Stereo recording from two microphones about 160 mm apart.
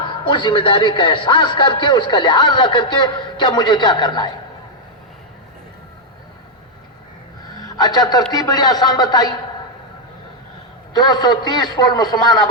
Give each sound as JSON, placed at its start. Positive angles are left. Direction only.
{"t": 0.0, "sound": "a man's voice", "side_deg": 30}
{"t": 7.4, "sound": "a sound", "side_deg": 25}
{"t": 8.3, "sound": "a man's voice", "side_deg": 25}
{"t": 10.9, "sound": "a man's voice", "side_deg": 25}